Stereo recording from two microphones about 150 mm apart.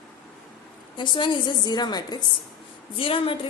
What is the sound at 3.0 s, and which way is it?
Speech, 35° left (ahead or behind).